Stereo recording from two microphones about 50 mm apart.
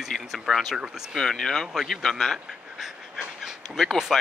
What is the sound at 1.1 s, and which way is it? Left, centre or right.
Speech, centre.